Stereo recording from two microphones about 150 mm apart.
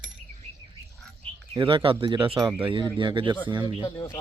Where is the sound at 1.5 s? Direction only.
30° right (ahead or behind).